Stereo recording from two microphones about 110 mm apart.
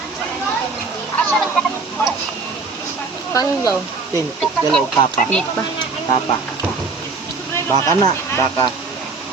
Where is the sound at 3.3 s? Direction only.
30° left (ahead or behind).